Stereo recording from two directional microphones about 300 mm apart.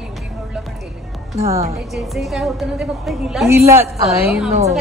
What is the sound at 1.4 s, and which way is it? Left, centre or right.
Speech, right.